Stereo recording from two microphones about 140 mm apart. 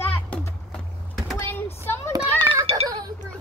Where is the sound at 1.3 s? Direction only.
15° left (ahead or behind).